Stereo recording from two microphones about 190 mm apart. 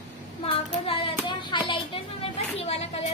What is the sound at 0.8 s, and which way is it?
Music, 30° left (ahead or behind).